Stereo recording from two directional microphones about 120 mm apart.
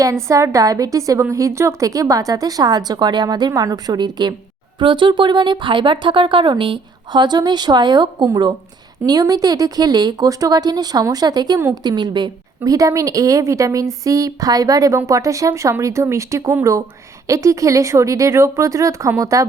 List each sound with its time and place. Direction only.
0.3 s a woman's voice: 25° right (ahead or behind)